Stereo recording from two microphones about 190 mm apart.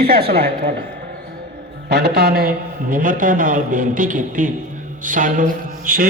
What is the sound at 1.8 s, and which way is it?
A man's voice, 60° right (ahead or behind).